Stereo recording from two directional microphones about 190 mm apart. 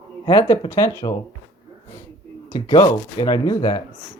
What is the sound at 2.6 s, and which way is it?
Speech, 20° left (ahead or behind).